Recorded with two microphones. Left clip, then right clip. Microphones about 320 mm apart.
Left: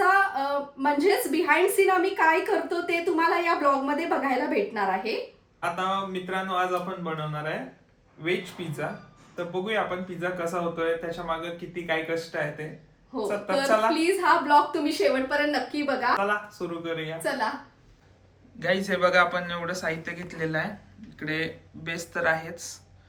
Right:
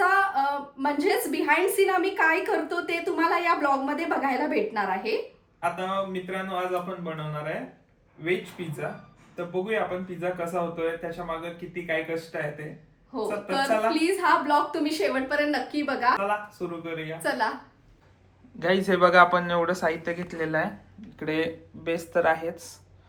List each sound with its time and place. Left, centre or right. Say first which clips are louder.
0.0 s a woman's voice: even; centre
18.6 s a woman's voice: right 3 dB; centre